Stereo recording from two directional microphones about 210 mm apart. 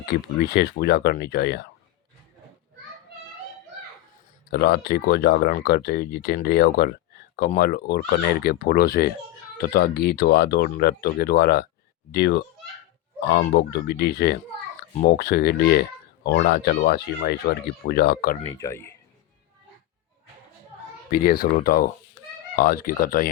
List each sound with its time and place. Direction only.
0.1 s speech: 50° left (ahead or behind)
4.5 s speech: 50° left (ahead or behind)
18.6 s speech: 10° left (ahead or behind)
21.1 s speech: 45° left (ahead or behind)